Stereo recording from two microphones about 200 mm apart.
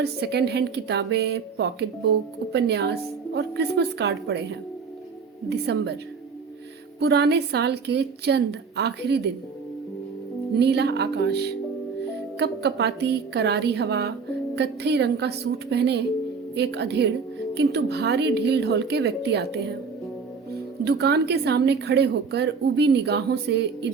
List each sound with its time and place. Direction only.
0.0 s a woman's voice: 55° right (ahead or behind)
7.0 s a woman's voice: 55° right (ahead or behind)
10.5 s a woman's voice: 55° right (ahead or behind)
20.8 s a woman's voice: 55° right (ahead or behind)